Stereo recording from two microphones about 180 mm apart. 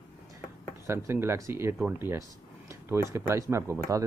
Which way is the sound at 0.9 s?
15° right (ahead or behind).